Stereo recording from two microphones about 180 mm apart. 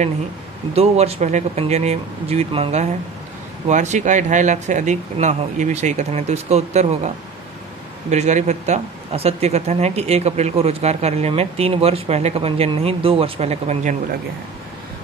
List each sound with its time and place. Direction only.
0.7 s speech: 35° right (ahead or behind)
8.1 s speech: 40° right (ahead or behind)